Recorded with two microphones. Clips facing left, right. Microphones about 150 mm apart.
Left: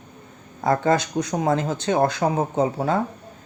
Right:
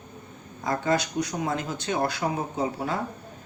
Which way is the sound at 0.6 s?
60° left (ahead or behind).